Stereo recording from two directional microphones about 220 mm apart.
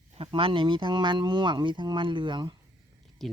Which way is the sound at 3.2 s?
Centre (ahead or behind).